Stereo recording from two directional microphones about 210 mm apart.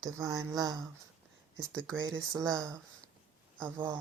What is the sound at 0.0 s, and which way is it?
Speech, 15° right (ahead or behind).